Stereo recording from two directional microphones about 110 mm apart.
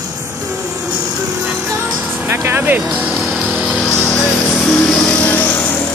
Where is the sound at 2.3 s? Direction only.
20° right (ahead or behind).